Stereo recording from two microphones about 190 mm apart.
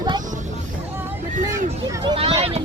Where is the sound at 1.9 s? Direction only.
25° right (ahead or behind).